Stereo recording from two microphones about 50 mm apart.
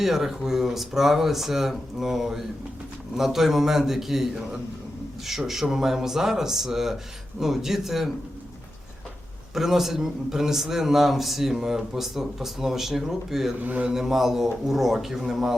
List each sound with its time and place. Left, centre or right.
0.0 s a man's voice: centre
9.6 s a man's voice: centre
13.6 s a man's voice: right
13.9 s a man's voice: centre